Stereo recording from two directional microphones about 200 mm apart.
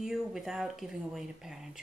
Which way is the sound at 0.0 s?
Centre (ahead or behind).